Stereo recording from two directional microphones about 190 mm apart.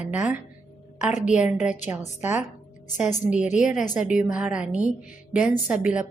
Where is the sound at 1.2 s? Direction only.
5° right (ahead or behind).